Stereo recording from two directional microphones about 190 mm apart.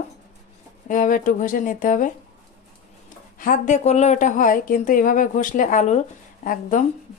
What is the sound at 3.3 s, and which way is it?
A woman's voice, 45° left (ahead or behind).